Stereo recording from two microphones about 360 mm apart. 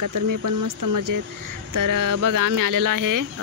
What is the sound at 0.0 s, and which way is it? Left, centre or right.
Speech, right.